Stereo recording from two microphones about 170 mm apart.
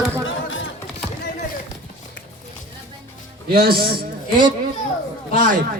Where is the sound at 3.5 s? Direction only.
60° right (ahead or behind).